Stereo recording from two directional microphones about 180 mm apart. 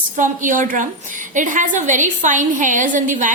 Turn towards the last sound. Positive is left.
turn(degrees=-45)  # may be behind; listen again after turning